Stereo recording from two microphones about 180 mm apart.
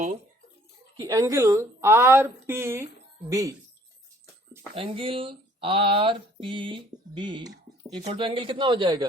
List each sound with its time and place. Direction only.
0.9 s speech: 20° right (ahead or behind)
4.7 s speech: 30° right (ahead or behind)